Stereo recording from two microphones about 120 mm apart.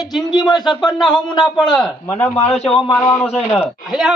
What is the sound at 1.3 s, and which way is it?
Speech, 40° left (ahead or behind).